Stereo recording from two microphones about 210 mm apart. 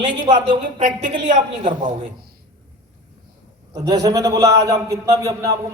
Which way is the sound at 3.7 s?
20° right (ahead or behind).